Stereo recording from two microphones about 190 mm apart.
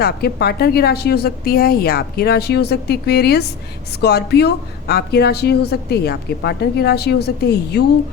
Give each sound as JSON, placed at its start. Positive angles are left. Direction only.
{"t": 0.0, "sound": "a woman's voice", "side_deg": 55}